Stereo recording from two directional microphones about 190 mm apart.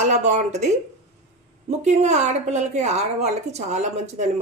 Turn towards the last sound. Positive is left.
turn(degrees=-35)  # may be behind; listen again after turning